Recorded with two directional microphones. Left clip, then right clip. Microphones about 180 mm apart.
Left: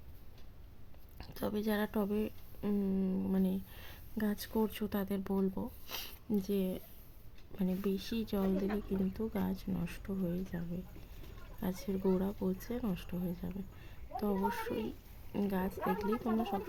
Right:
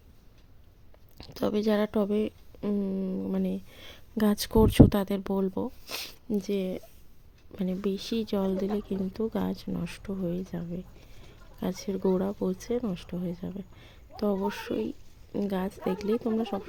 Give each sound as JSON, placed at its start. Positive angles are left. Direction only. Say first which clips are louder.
{"t": 1.2, "sound": "a woman's voice", "louder": "right 9 dB", "side_deg": -30}
{"t": 4.2, "sound": "speech", "louder": "right 12 dB", "side_deg": -45}
{"t": 11.6, "sound": "speech", "louder": "right 7 dB", "side_deg": -30}